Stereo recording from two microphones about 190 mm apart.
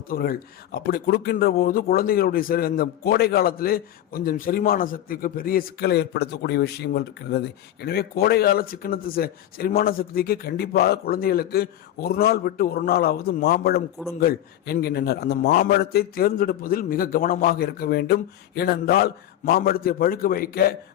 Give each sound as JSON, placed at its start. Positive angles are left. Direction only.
{"t": 0.1, "sound": "speech", "side_deg": 50}